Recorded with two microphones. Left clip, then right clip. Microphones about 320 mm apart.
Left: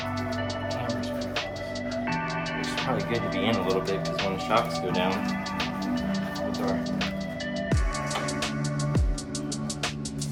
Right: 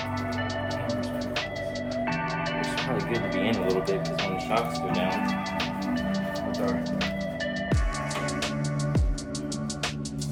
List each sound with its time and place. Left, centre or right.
3.5 s speech: centre